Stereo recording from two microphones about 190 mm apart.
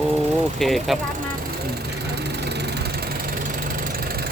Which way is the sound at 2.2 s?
60° right (ahead or behind).